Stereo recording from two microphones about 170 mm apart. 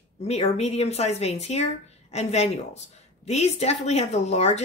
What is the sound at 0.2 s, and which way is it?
Speech, 40° left (ahead or behind).